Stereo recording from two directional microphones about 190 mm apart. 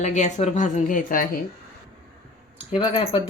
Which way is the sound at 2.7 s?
30° left (ahead or behind).